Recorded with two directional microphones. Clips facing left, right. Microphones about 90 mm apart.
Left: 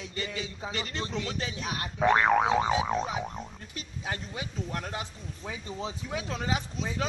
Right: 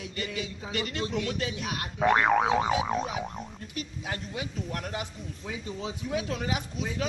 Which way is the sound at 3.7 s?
30° left (ahead or behind).